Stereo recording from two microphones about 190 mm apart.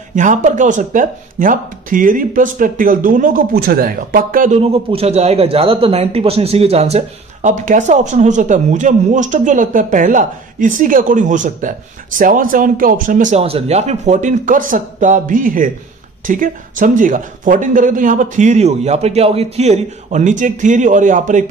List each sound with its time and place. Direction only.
0.1 s speech: 40° right (ahead or behind)
4.6 s speech: 30° right (ahead or behind)